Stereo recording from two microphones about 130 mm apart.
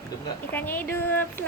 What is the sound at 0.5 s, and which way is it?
Speech, 15° left (ahead or behind).